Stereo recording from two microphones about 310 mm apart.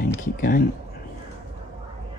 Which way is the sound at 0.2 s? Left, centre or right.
Left.